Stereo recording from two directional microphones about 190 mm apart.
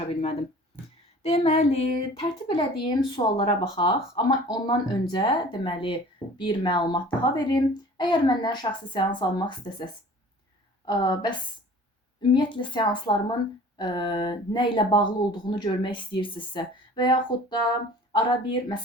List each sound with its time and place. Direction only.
0.1 s speech: 30° left (ahead or behind)